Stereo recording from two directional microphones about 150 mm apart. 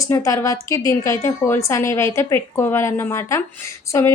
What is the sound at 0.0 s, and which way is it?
A woman's voice, 20° left (ahead or behind).